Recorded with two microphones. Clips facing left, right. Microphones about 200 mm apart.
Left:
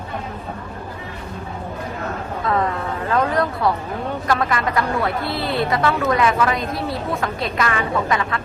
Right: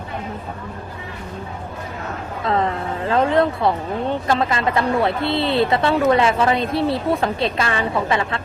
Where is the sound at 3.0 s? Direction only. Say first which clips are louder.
Right 3 dB; 25° right (ahead or behind).